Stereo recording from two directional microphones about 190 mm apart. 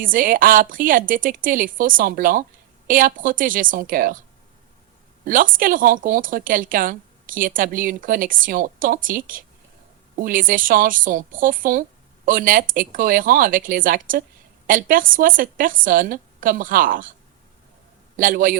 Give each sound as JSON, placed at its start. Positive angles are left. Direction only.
{"t": 0.0, "sound": "a woman's voice", "side_deg": -45}
{"t": 5.2, "sound": "a woman's voice", "side_deg": -45}
{"t": 18.2, "sound": "a woman's voice", "side_deg": -45}